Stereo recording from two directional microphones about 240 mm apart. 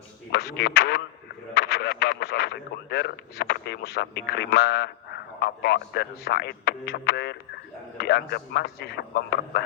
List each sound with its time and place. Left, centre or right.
0.3 s a man's voice: left